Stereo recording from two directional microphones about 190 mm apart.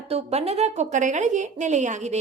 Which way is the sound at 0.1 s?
35° right (ahead or behind).